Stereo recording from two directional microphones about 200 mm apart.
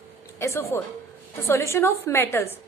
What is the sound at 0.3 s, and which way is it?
A woman's voice, 15° left (ahead or behind).